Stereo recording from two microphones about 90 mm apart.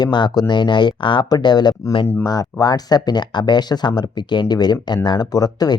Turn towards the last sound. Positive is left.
turn(degrees=45)  # may be behind; listen again after turning